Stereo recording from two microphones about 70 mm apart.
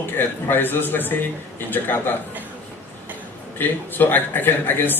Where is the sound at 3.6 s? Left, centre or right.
Left.